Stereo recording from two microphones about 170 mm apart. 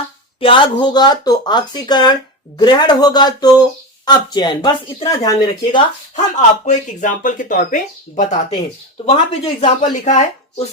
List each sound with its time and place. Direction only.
0.3 s speech: 30° left (ahead or behind)
6.1 s speech: 45° left (ahead or behind)